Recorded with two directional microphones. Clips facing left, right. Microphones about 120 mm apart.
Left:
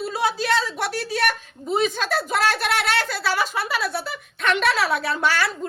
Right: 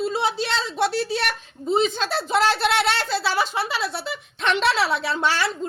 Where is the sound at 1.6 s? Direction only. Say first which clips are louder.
Right 1 dB; 25° right (ahead or behind).